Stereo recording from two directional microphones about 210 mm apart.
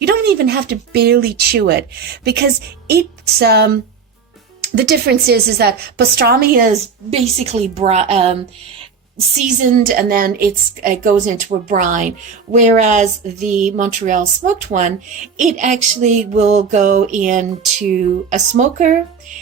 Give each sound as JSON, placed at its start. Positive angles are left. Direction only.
{"t": 0.0, "sound": "speech", "side_deg": -50}
{"t": 7.8, "sound": "a woman's voice", "side_deg": -30}